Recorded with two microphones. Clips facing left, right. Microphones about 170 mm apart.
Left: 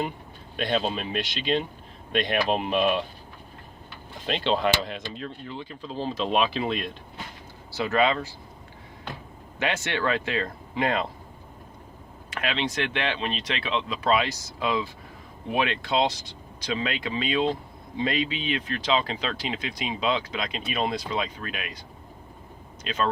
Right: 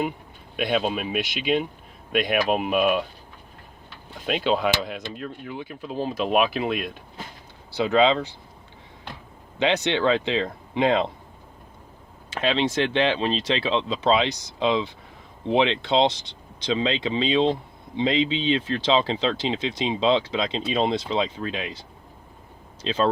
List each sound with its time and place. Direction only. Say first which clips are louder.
0.5 s speech: right 2 dB; 5° right (ahead or behind)
4.3 s speech: right 2 dB; 5° right (ahead or behind)
7.8 s speech: right 4 dB; 20° right (ahead or behind)
9.6 s speech: right 6 dB; 20° right (ahead or behind)
12.3 s speech: right 6 dB; 25° right (ahead or behind)